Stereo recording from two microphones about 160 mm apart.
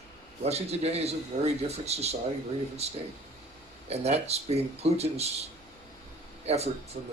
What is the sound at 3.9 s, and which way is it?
Speech, 40° right (ahead or behind).